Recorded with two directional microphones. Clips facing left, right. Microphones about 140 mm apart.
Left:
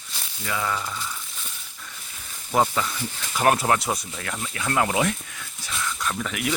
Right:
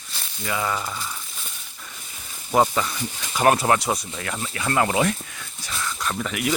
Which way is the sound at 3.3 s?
Centre (ahead or behind).